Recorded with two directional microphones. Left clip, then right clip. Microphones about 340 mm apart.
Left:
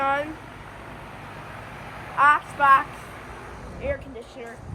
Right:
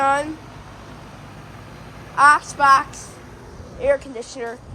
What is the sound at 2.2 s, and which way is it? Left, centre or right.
Speech, centre.